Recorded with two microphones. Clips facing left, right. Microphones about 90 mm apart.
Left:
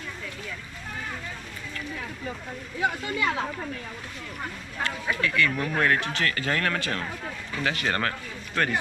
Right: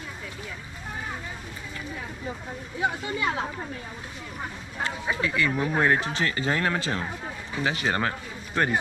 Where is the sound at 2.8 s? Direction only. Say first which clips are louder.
Left 1 dB; 15° right (ahead or behind).